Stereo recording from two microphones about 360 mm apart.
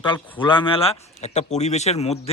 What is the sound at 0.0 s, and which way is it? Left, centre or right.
Speech, centre.